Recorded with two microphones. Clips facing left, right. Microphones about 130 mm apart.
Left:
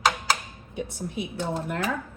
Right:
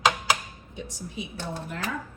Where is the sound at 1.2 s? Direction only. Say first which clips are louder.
Left 5 dB; 65° left (ahead or behind).